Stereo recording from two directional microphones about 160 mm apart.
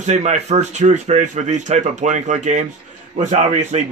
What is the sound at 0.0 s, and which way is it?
A man's voice, 45° right (ahead or behind).